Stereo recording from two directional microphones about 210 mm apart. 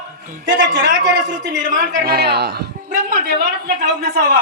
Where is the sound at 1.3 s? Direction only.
45° right (ahead or behind).